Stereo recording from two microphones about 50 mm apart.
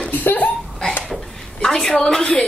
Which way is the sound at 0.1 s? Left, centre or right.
Left.